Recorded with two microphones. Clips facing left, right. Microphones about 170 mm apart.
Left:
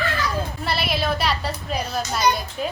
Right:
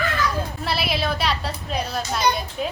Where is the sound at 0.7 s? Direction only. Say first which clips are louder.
Left 1 dB; centre (ahead or behind).